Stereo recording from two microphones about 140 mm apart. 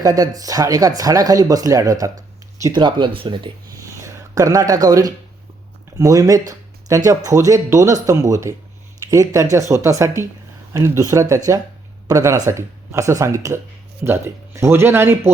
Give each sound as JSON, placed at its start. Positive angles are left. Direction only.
{"t": 0.0, "sound": "speech", "side_deg": -25}
{"t": 3.8, "sound": "a sound", "side_deg": -20}
{"t": 6.0, "sound": "speech", "side_deg": -25}